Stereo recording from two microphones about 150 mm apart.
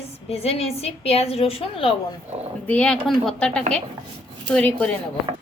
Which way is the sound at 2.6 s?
10° left (ahead or behind).